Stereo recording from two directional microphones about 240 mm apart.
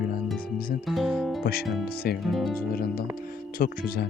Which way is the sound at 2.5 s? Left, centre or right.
Left.